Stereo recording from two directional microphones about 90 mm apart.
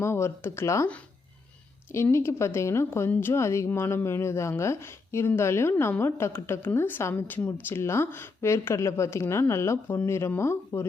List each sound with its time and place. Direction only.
0.0 s a woman's voice: 30° left (ahead or behind)
1.9 s a woman's voice: 30° left (ahead or behind)